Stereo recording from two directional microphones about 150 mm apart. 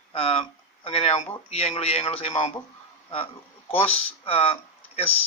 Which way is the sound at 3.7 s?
40° left (ahead or behind).